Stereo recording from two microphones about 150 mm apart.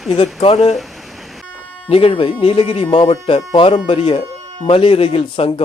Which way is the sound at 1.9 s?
40° left (ahead or behind).